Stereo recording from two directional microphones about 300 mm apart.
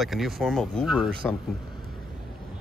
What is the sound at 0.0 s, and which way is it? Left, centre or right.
Speech, centre.